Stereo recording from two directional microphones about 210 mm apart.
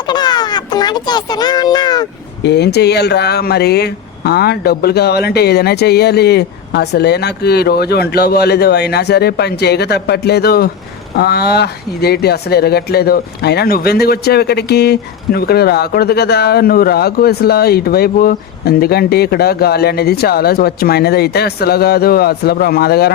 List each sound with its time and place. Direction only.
0.0 s speech: 20° left (ahead or behind)
2.4 s speech: 55° left (ahead or behind)